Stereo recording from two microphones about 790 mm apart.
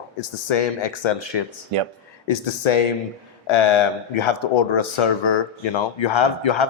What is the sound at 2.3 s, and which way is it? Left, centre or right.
Speech, left.